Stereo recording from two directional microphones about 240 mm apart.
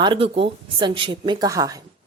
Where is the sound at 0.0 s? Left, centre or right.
Right.